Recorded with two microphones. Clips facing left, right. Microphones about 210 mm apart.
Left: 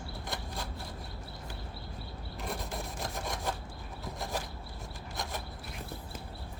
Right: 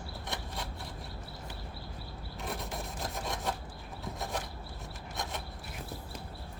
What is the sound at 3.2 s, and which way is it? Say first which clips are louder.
Filing: right 1 dB; centre (ahead or behind).